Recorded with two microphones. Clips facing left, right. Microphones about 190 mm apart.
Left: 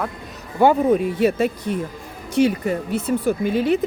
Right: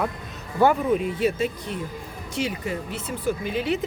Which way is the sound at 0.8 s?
45° left (ahead or behind).